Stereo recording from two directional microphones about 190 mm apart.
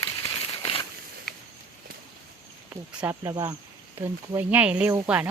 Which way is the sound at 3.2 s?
20° right (ahead or behind).